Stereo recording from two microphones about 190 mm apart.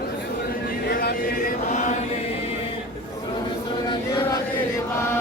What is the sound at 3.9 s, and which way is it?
Chant, 20° left (ahead or behind).